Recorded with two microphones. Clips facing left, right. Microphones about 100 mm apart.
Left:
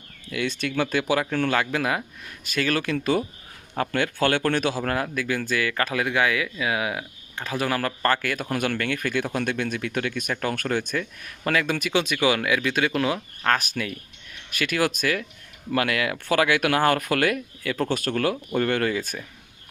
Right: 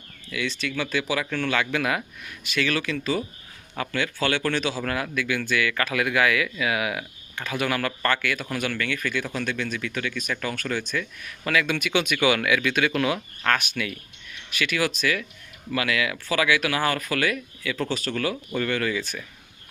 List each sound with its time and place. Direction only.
0.3 s speech: 50° left (ahead or behind); by 2.3 s 25° left (ahead or behind)
2.4 s speech: 40° left (ahead or behind)
5.1 s speech: 35° left (ahead or behind)